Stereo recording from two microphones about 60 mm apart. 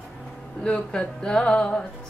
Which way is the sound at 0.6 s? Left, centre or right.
Centre.